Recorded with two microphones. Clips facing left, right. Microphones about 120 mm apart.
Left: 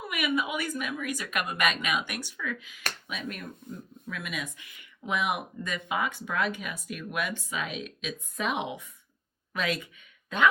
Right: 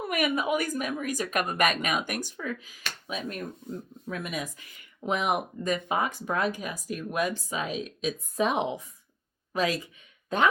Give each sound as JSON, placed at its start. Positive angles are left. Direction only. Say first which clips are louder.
{"t": 0.0, "sound": "speech", "louder": "right 2 dB", "side_deg": -45}